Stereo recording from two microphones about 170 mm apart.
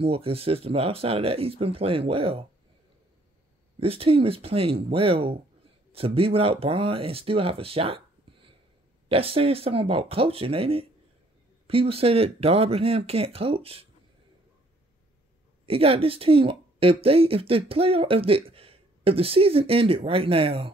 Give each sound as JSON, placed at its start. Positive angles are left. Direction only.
{"t": 0.0, "sound": "a woman's voice", "side_deg": -35}
{"t": 3.8, "sound": "a woman's voice", "side_deg": -35}
{"t": 15.6, "sound": "a woman's voice", "side_deg": -35}